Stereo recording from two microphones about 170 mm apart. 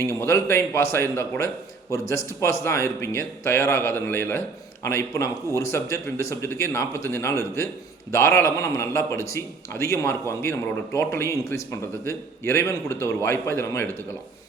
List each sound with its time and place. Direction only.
0.1 s a man's voice: 15° left (ahead or behind)